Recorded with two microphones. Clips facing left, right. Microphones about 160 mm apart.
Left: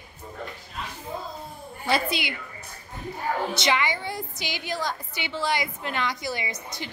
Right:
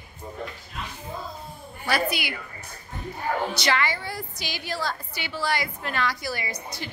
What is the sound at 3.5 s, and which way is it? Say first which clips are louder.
A woman's voice: even; 20° left (ahead or behind).